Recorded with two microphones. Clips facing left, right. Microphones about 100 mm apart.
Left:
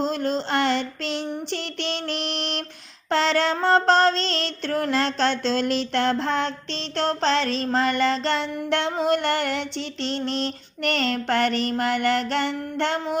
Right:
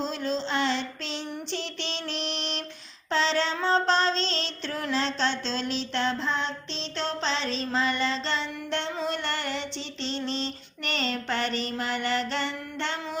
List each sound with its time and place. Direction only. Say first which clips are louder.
0.0 s child singing: left 5 dB; 55° left (ahead or behind)
3.1 s music: left 5 dB; 60° left (ahead or behind)